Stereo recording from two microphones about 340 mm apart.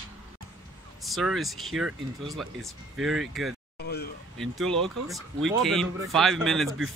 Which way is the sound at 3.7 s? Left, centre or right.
Left.